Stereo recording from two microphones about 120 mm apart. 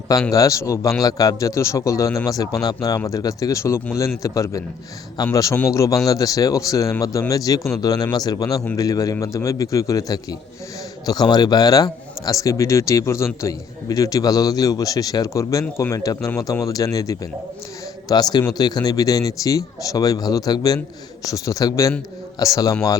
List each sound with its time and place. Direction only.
0.3 s a man's voice: 30° left (ahead or behind)